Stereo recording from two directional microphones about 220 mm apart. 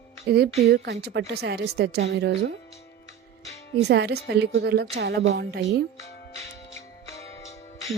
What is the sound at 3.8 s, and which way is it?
A woman's voice, 50° right (ahead or behind).